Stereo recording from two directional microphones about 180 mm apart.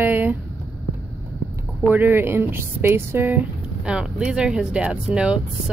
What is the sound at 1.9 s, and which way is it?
Speech, 10° right (ahead or behind).